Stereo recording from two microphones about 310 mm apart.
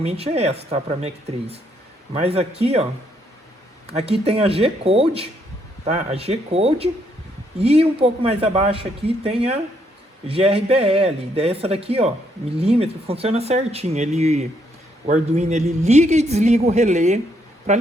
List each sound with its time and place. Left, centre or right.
0.0 s a man's voice: centre
3.9 s a man's voice: centre